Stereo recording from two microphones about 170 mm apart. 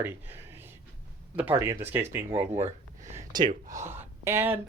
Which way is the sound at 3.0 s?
15° right (ahead or behind).